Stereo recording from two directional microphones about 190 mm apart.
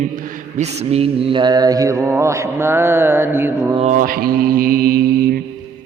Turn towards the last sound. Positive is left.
turn(degrees=-50)  # may be behind; listen again after turning